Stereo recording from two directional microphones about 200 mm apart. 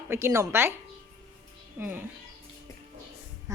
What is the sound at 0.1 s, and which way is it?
Speech, 15° right (ahead or behind).